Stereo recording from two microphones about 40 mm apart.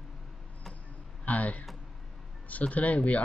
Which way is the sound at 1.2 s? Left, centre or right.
Left.